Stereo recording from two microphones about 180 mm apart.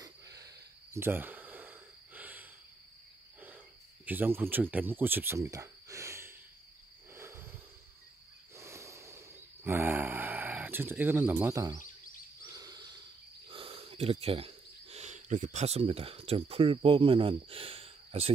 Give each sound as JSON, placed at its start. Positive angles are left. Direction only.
{"t": 0.0, "sound": "snort", "side_deg": -20}
{"t": 3.3, "sound": "cricket", "side_deg": -10}
{"t": 7.1, "sound": "a sound", "side_deg": -15}
{"t": 13.5, "sound": "speech", "side_deg": -30}